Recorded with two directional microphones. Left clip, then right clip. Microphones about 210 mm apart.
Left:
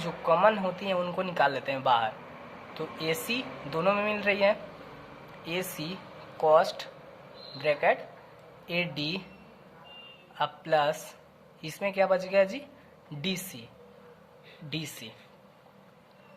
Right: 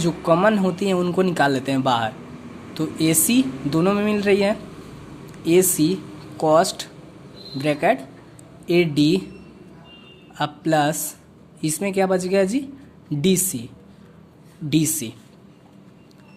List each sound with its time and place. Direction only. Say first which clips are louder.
0.0 s speech: right 6 dB; 25° right (ahead or behind)
10.3 s a man's voice: right 6 dB; 25° right (ahead or behind)
14.7 s speech: right 16 dB; 30° right (ahead or behind)